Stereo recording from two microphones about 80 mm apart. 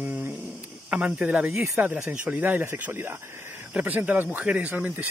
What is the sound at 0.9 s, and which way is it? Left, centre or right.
Speech, centre.